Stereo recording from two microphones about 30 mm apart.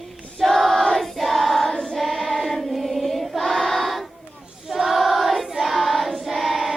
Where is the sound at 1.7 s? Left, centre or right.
Centre.